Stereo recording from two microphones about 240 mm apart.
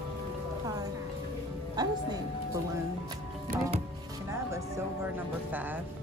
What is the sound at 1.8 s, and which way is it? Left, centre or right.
Music, centre.